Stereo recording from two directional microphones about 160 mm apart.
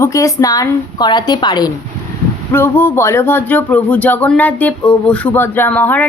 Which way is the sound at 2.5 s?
15° left (ahead or behind).